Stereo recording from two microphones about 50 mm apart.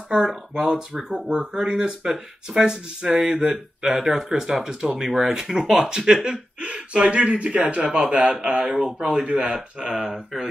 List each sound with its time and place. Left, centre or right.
0.1 s speech: centre
9.2 s speech: right